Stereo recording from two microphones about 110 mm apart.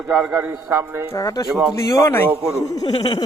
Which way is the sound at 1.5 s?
5° right (ahead or behind).